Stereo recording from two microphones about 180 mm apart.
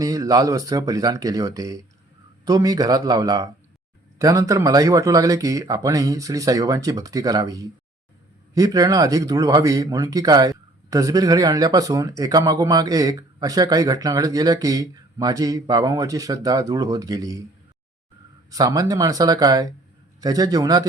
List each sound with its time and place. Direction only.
0.0 s speech: 20° right (ahead or behind)
18.5 s speech: 20° right (ahead or behind)